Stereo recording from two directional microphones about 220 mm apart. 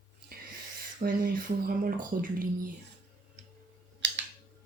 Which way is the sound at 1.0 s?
40° right (ahead or behind).